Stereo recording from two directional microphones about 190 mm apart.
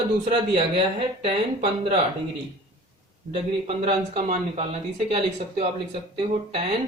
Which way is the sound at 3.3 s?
30° right (ahead or behind).